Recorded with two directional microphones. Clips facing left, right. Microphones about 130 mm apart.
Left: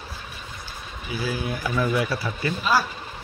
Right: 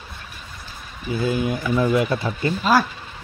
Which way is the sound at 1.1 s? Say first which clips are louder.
Right 6 dB; 25° right (ahead or behind).